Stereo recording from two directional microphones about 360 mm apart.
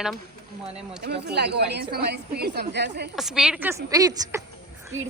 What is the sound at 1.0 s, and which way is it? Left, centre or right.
Speech, right.